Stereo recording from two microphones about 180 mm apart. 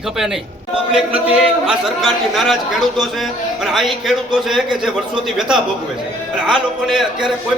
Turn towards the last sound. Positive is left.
turn(degrees=0)  # may be behind; listen again after turning